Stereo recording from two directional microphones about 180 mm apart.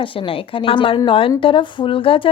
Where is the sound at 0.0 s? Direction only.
30° left (ahead or behind).